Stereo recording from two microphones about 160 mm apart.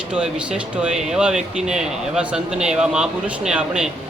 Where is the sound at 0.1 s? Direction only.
5° right (ahead or behind).